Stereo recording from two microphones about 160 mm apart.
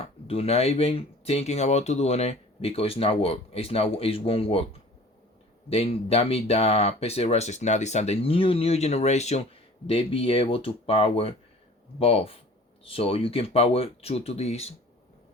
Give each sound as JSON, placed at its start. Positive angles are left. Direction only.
{"t": 0.3, "sound": "speech", "side_deg": 40}
{"t": 5.6, "sound": "speech", "side_deg": 40}